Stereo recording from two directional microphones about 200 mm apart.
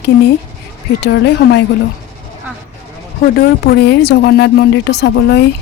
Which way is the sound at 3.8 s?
55° left (ahead or behind).